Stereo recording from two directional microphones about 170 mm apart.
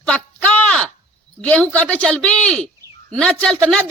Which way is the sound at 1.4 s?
5° left (ahead or behind).